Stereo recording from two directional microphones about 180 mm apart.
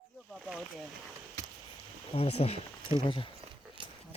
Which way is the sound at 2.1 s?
35° left (ahead or behind).